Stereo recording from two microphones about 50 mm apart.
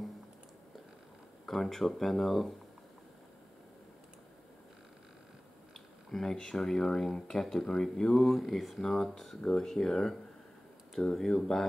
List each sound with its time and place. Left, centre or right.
1.4 s speech: centre
6.1 s speech: centre